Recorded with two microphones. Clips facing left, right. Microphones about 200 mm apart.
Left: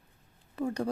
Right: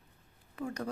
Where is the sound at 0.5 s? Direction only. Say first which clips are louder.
Left 6 dB; 30° left (ahead or behind).